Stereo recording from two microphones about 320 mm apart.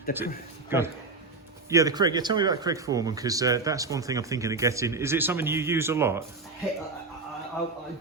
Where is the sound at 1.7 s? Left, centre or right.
Centre.